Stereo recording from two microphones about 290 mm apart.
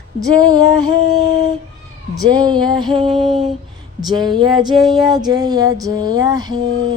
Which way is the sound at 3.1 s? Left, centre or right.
Centre.